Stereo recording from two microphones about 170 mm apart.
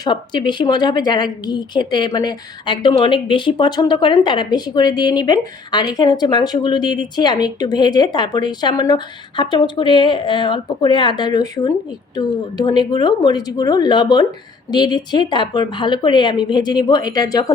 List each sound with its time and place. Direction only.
0.0 s a woman's voice: 25° left (ahead or behind)